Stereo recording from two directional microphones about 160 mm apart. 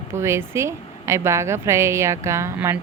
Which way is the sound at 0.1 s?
15° right (ahead or behind).